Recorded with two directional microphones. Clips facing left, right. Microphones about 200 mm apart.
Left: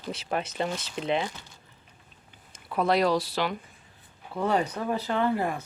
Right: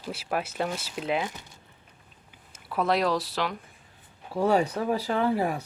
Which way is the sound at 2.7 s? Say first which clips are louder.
Left 1 dB; centre (ahead or behind).